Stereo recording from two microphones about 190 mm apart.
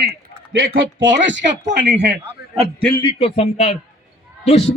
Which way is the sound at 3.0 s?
30° left (ahead or behind).